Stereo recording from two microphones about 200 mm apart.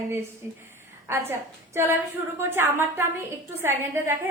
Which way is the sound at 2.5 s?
10° right (ahead or behind).